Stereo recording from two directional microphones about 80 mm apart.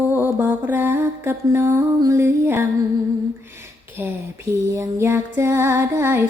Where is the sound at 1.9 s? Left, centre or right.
Right.